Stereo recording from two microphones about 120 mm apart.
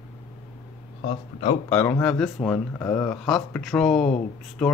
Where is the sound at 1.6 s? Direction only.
20° left (ahead or behind).